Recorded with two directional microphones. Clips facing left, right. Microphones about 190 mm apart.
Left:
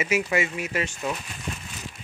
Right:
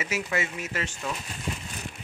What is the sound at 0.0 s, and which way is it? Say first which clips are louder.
Speech: left 5 dB; 15° left (ahead or behind).